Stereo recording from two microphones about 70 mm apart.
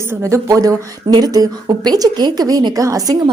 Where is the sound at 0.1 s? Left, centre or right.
Right.